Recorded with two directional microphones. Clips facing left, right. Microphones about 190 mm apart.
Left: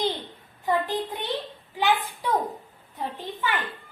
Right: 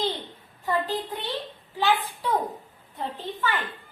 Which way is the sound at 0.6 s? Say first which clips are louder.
Left 2 dB; 20° left (ahead or behind).